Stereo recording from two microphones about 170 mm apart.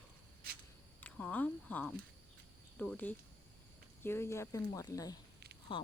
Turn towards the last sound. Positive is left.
turn(degrees=30)  # may be behind; listen again after turning